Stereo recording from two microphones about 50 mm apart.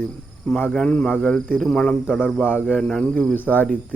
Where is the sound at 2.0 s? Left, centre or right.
Left.